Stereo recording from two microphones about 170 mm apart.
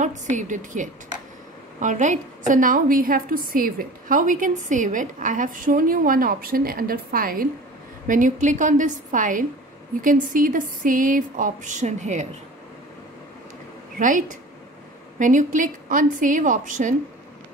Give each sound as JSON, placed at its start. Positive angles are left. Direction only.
{"t": 0.0, "sound": "a woman's voice", "side_deg": -45}
{"t": 13.9, "sound": "a woman's voice", "side_deg": -50}